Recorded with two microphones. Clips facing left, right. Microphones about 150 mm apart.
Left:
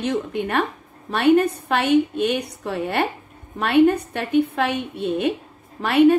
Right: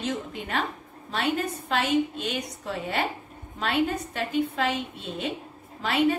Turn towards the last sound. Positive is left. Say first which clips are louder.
# left 9 dB
turn(degrees=60)  # may be behind; listen again after turning